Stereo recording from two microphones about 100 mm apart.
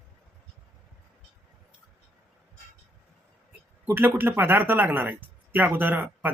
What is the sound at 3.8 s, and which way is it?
Speech, 20° right (ahead or behind).